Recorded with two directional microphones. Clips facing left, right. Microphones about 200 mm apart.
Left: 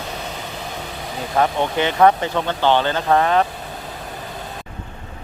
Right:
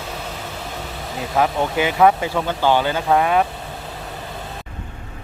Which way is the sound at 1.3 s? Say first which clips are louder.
Even; 5° right (ahead or behind).